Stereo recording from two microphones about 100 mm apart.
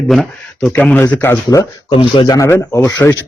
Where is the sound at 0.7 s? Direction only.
15° left (ahead or behind).